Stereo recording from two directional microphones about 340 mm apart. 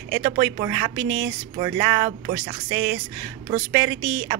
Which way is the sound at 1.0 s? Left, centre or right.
Right.